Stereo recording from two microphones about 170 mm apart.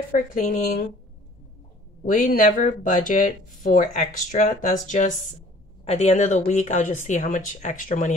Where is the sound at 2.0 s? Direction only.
50° left (ahead or behind).